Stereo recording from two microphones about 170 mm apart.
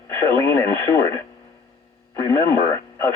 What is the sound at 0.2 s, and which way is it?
Speech, 15° left (ahead or behind).